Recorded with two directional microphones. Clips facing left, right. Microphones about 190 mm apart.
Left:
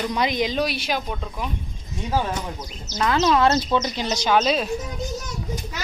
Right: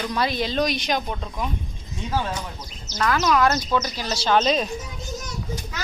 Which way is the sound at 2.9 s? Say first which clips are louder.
Left 1 dB; 20° left (ahead or behind).